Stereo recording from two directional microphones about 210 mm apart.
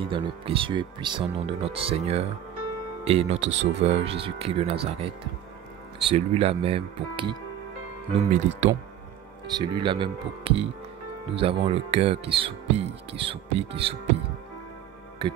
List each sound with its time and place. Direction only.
0.0 s speech: 25° right (ahead or behind)
9.6 s speech: 20° right (ahead or behind)